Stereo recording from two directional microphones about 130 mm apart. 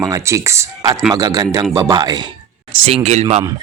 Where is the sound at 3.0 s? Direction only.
60° right (ahead or behind).